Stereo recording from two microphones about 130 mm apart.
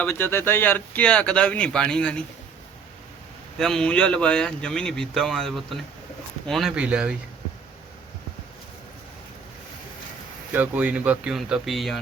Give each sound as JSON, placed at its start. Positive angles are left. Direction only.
{"t": 0.0, "sound": "speech", "side_deg": 20}
{"t": 3.6, "sound": "speech", "side_deg": 5}
{"t": 10.5, "sound": "speech", "side_deg": -10}